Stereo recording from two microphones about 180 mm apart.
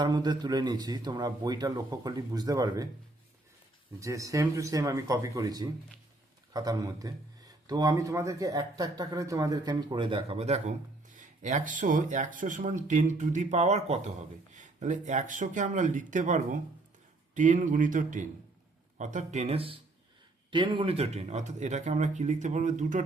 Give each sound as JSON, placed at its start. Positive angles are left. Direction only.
{"t": 0.0, "sound": "speech", "side_deg": -25}
{"t": 4.0, "sound": "speech", "side_deg": -15}